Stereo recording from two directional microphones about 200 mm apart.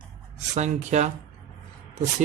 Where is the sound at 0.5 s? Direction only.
35° right (ahead or behind).